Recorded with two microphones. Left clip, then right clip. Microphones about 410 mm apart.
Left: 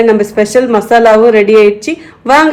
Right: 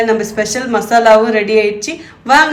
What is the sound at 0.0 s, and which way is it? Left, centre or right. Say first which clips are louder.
Speech: left 6 dB; centre.